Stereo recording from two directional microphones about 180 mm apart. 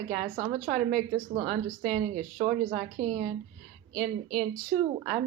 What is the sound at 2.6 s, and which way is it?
Speech, 40° right (ahead or behind).